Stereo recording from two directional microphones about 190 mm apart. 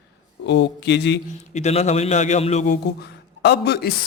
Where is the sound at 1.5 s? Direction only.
35° left (ahead or behind).